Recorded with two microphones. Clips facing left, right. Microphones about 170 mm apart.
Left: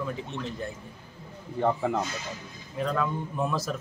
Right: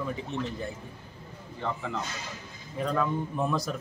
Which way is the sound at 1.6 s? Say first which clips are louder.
Left 7 dB; 50° left (ahead or behind).